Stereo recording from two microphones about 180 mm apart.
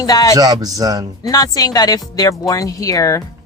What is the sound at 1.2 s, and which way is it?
Speech, 20° left (ahead or behind).